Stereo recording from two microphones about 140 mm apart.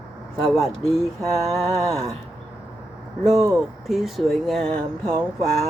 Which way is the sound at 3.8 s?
Centre (ahead or behind).